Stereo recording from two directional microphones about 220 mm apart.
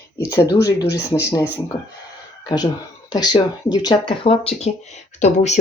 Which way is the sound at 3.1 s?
20° left (ahead or behind).